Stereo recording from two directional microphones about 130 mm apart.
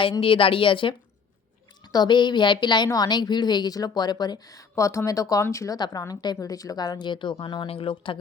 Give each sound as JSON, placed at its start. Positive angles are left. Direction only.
{"t": 0.0, "sound": "a woman's voice", "side_deg": 40}